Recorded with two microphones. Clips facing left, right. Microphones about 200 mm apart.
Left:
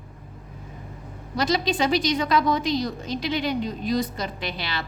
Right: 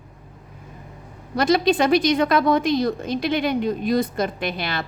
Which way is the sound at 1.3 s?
55° right (ahead or behind).